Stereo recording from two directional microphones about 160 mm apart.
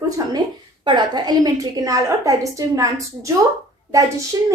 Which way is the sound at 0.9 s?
25° right (ahead or behind).